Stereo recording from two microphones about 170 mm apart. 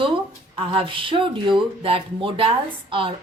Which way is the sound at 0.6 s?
30° right (ahead or behind).